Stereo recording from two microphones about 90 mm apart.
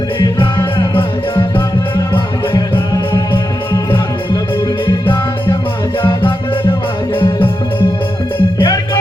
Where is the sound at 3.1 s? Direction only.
50° left (ahead or behind).